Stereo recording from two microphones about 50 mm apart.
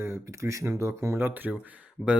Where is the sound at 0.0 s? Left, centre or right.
Right.